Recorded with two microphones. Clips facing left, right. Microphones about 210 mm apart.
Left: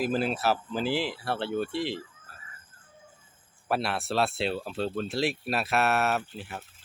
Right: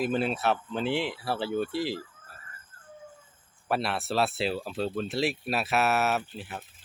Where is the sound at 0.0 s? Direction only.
Centre (ahead or behind).